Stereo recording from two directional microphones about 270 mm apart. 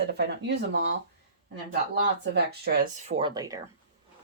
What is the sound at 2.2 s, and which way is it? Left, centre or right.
Speech, right.